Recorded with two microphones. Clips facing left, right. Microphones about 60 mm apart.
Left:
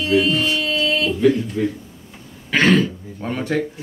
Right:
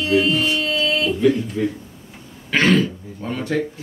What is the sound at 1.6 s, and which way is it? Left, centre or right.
Speech, centre.